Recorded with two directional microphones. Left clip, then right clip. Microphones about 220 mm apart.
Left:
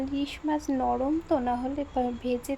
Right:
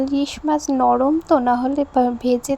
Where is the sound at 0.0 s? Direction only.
30° right (ahead or behind).